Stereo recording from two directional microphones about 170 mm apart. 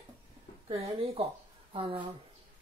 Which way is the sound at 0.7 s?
35° right (ahead or behind).